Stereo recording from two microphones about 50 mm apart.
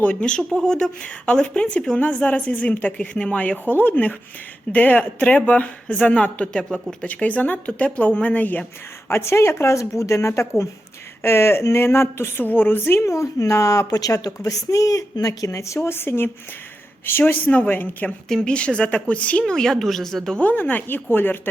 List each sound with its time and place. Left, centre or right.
0.0 s a woman's voice: left
5.6 s a woman's voice: left
7.1 s a woman's voice: left
9.0 s speech: left
11.2 s speech: left
12.5 s speech: left
13.0 s speech: left
15.3 s speech: left
18.3 s speech: centre
18.5 s a woman's voice: left
19.5 s speech: centre
20.4 s speech: left